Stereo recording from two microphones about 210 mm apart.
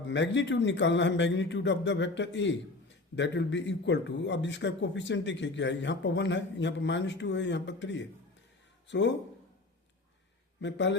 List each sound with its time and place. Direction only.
0.1 s speech: 60° left (ahead or behind)
10.6 s speech: 60° left (ahead or behind)